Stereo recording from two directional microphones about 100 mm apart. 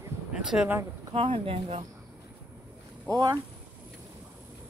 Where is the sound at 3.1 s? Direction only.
40° right (ahead or behind).